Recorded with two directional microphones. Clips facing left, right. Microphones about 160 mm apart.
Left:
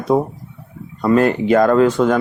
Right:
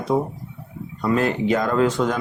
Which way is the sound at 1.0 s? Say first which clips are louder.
Left 6 dB; 55° left (ahead or behind).